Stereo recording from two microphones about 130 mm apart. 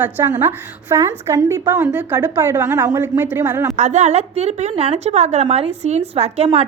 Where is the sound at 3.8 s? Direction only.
65° right (ahead or behind).